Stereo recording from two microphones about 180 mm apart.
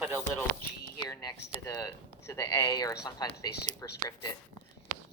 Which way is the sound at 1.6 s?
20° left (ahead or behind).